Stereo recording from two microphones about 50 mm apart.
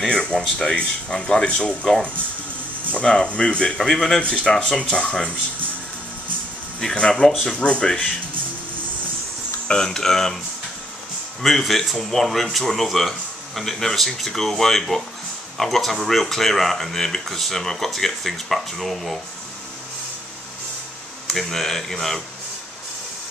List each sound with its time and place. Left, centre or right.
0.0 s music: left
0.4 s speech: centre
0.7 s speech: left
2.9 s speech: centre
6.8 s speech: centre
9.7 s speech: centre
11.4 s speech: centre
21.3 s speech: centre